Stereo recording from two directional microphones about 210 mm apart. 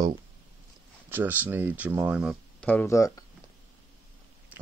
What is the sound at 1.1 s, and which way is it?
Speech, 10° right (ahead or behind).